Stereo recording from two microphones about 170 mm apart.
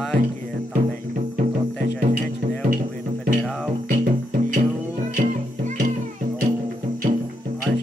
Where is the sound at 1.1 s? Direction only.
55° right (ahead or behind).